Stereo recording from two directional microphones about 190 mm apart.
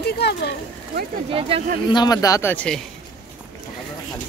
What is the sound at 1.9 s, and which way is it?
Speech, 20° left (ahead or behind).